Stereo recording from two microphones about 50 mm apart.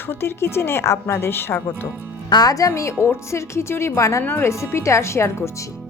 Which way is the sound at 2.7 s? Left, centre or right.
Left.